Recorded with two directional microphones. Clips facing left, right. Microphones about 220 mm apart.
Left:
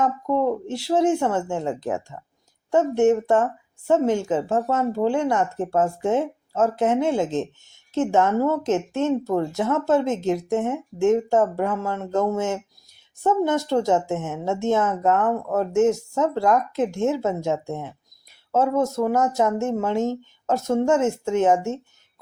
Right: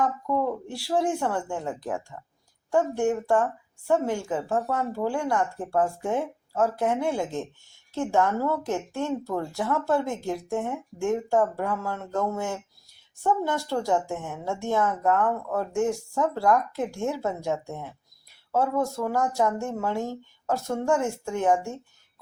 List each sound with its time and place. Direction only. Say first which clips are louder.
0.0 s speech: left 4 dB; 20° left (ahead or behind)